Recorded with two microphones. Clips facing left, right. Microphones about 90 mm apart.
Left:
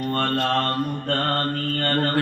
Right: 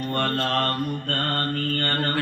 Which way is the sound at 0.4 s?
25° left (ahead or behind).